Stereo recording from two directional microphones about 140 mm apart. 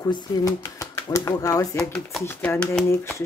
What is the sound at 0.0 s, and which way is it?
Speech, 25° left (ahead or behind).